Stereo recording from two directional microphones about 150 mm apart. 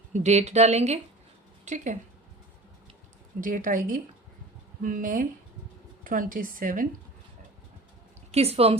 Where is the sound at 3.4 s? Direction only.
60° right (ahead or behind).